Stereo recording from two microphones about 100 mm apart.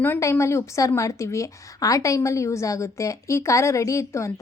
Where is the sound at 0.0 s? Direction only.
25° left (ahead or behind).